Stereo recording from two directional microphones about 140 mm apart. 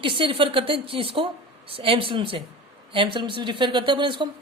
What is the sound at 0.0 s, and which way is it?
Speech, 35° right (ahead or behind).